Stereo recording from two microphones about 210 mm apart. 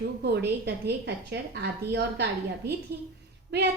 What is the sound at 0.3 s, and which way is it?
A woman's voice, 50° right (ahead or behind).